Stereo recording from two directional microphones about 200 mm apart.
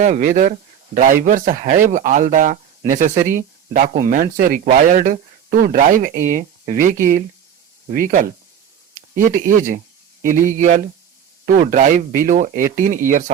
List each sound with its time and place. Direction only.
0.0 s speech: 40° right (ahead or behind)